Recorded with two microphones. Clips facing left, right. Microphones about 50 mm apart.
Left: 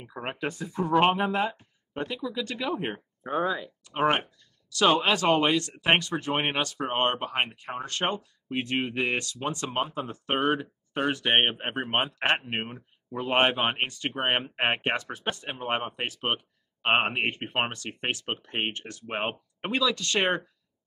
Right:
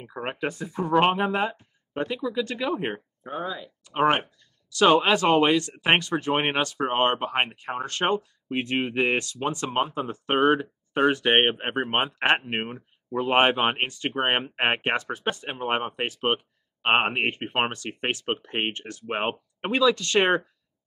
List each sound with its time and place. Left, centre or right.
0.0 s speech: centre
3.3 s speech: centre
3.9 s speech: centre
7.3 s speech: right
8.0 s speech: centre
8.9 s speech: right
10.3 s speech: centre
12.4 s speech: centre
16.2 s a sound: centre
17.1 s speech: centre
19.7 s speech: centre